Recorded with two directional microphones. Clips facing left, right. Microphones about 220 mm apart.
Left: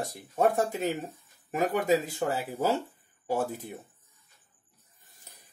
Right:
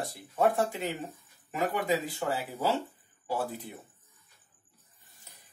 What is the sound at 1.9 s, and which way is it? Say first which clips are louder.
Speech: left 4 dB; 45° left (ahead or behind).